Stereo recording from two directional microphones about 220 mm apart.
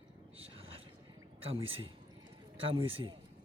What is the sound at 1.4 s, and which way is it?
A man's voice, 25° right (ahead or behind).